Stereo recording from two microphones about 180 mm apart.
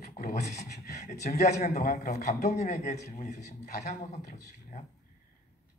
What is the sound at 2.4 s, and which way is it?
A man's voice, 40° left (ahead or behind).